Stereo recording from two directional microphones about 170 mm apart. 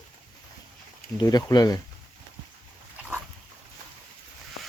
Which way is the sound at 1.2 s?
25° left (ahead or behind).